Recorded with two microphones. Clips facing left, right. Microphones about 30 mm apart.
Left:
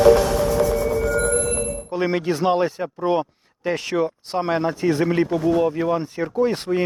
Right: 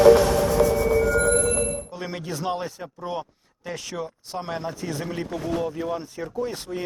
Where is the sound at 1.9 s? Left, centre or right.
Left.